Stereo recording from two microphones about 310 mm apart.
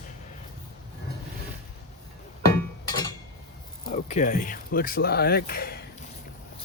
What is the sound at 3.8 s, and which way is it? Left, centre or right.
Speech, left.